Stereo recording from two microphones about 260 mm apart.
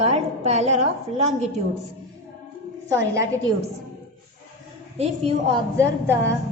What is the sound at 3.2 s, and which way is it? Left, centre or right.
Speech, centre.